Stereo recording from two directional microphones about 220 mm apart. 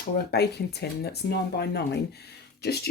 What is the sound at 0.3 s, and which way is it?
Speech, 45° left (ahead or behind).